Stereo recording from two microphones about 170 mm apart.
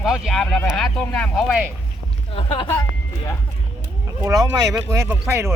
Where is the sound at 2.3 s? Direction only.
30° left (ahead or behind).